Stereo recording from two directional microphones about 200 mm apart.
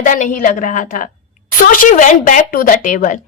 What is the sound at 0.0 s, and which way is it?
A woman's voice, 40° left (ahead or behind).